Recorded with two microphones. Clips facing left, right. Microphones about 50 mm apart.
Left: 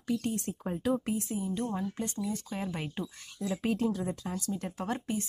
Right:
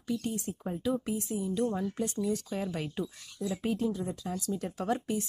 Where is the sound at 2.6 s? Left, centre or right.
Left.